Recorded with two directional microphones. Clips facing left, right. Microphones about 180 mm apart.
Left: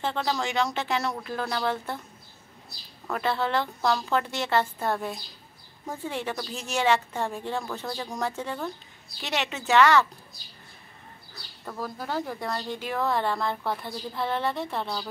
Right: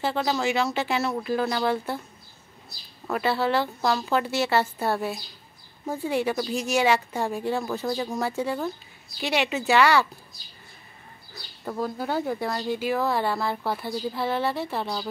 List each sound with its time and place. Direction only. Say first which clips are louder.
0.0 s a woman's voice: right 3 dB; 5° right (ahead or behind)
3.1 s a woman's voice: right 3 dB; 5° right (ahead or behind)
11.6 s speech: right 5 dB; 20° right (ahead or behind)
12.4 s speech: right 4 dB; 5° right (ahead or behind)